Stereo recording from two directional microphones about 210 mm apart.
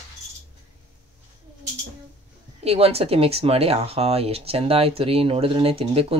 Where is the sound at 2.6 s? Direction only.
30° right (ahead or behind).